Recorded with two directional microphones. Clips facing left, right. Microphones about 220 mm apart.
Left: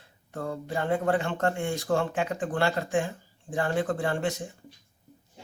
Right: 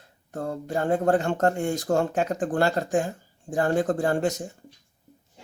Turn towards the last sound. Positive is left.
turn(degrees=-40)  # may be behind; listen again after turning